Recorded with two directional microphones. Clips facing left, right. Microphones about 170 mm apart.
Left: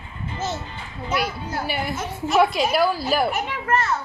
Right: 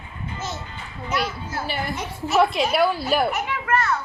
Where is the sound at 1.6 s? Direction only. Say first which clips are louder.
Left 1 dB; centre (ahead or behind).